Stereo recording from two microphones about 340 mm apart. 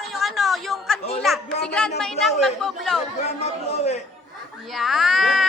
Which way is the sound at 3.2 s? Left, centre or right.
Centre.